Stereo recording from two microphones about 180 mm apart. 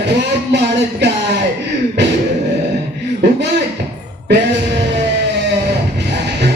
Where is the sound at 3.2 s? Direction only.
70° right (ahead or behind).